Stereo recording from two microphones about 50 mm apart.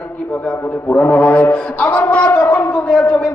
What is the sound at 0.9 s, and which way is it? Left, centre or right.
A man's voice, left.